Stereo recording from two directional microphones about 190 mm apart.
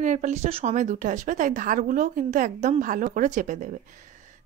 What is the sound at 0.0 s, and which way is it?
Speech, 40° right (ahead or behind).